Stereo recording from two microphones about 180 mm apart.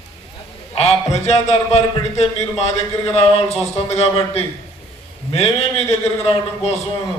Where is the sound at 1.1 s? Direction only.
35° left (ahead or behind).